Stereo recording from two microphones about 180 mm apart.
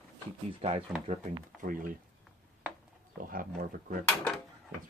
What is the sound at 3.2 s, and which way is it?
Speech, 50° right (ahead or behind).